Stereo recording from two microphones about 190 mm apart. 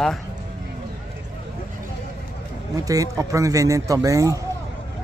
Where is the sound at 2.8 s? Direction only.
20° right (ahead or behind).